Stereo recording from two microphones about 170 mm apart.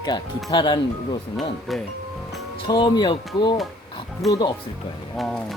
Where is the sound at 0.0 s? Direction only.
25° left (ahead or behind).